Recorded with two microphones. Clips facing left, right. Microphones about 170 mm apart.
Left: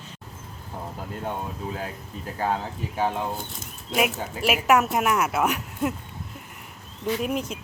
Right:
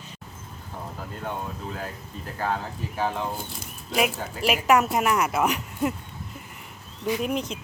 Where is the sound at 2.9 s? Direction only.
15° left (ahead or behind).